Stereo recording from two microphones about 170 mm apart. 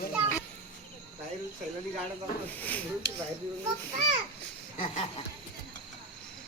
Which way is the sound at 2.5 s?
10° left (ahead or behind).